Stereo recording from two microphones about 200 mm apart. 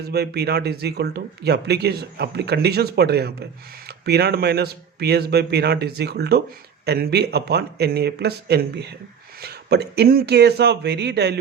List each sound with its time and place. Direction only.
0.1 s a man's voice: 55° right (ahead or behind)